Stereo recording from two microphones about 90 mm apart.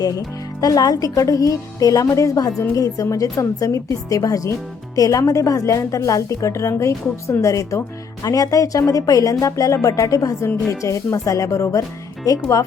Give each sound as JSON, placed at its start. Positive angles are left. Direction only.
{"t": 0.0, "sound": "a woman's voice", "side_deg": 45}